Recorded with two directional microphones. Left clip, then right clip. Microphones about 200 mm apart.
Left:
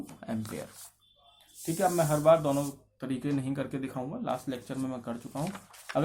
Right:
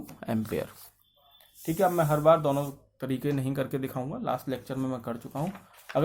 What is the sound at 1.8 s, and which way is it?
Speech, 35° right (ahead or behind).